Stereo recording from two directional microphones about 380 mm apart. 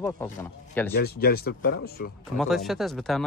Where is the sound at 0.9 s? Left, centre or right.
Left.